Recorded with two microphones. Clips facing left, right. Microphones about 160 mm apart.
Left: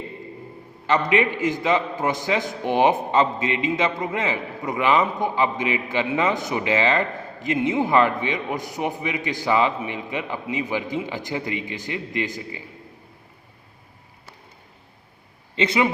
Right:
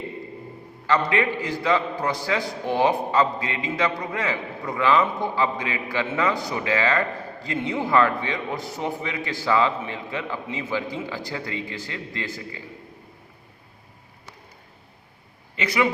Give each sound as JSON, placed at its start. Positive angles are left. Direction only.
{"t": 0.9, "sound": "a man's voice", "side_deg": 20}
{"t": 15.5, "sound": "a man's voice", "side_deg": 25}